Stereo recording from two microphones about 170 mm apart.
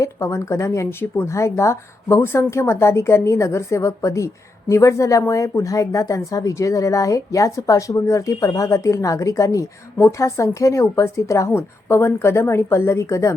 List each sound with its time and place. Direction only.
0.0 s speech: 15° left (ahead or behind)